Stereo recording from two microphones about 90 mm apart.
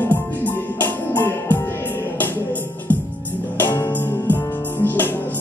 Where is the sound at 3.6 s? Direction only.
25° left (ahead or behind).